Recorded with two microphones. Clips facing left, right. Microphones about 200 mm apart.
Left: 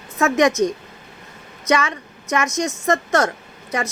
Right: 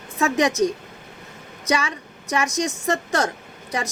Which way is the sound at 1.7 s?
35° right (ahead or behind).